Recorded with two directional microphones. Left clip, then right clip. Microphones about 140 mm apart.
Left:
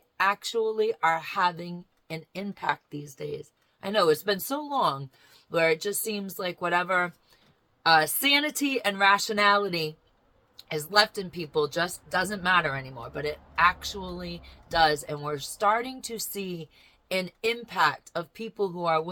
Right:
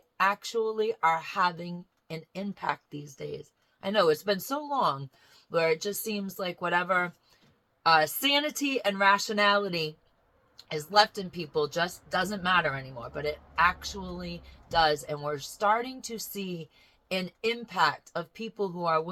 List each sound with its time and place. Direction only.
0.2 s speech: 20° left (ahead or behind)